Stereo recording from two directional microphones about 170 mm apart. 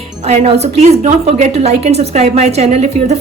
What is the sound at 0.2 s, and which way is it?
Speech, 40° right (ahead or behind).